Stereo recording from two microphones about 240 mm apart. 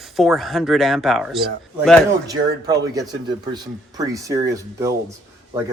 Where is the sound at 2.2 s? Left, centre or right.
Centre.